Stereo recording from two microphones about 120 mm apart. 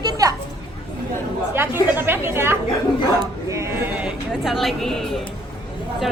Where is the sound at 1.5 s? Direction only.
20° right (ahead or behind).